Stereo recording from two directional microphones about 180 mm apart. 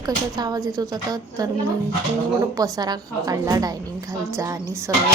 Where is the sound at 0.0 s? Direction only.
20° right (ahead or behind).